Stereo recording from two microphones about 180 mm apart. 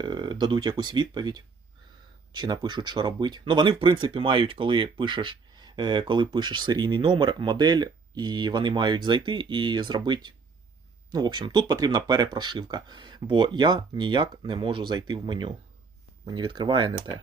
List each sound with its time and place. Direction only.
0.0 s speech: 25° right (ahead or behind)